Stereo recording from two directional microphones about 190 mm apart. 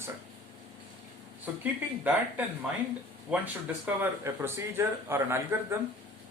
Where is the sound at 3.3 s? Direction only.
10° right (ahead or behind).